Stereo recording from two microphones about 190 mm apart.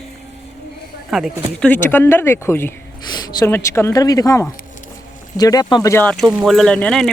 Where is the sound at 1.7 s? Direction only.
10° left (ahead or behind).